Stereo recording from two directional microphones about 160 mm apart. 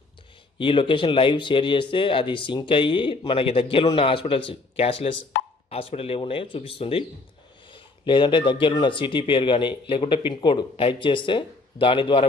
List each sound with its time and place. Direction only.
0.6 s speech: 30° left (ahead or behind)